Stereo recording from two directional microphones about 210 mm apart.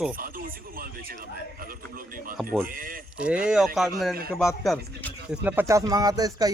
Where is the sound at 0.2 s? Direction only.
40° right (ahead or behind).